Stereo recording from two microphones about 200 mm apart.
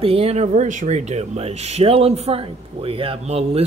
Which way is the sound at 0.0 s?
30° right (ahead or behind).